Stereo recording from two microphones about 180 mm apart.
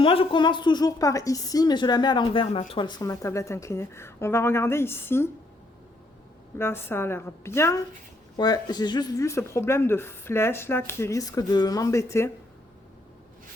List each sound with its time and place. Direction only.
0.0 s a woman's voice: 30° left (ahead or behind); by 5.3 s 15° left (ahead or behind)
6.6 s speech: 15° left (ahead or behind)